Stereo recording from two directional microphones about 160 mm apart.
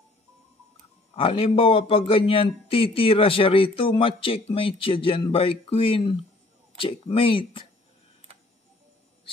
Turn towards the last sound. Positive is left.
turn(degrees=35)  # may be behind; listen again after turning